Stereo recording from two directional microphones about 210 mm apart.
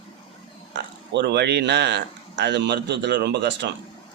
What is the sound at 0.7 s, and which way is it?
Speech, 55° right (ahead or behind).